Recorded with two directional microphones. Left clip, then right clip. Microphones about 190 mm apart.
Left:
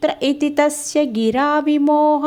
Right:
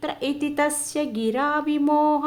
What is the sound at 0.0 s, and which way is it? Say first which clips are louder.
Speech: left 8 dB; 30° left (ahead or behind).